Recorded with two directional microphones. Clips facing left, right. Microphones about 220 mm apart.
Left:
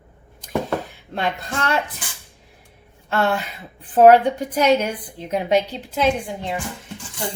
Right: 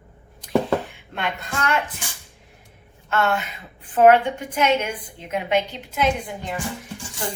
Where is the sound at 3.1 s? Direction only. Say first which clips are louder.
Left 1 dB; 35° left (ahead or behind).